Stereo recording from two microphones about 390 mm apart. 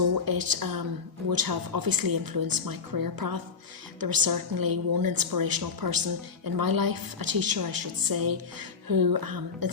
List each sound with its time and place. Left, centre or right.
0.3 s a woman's voice: right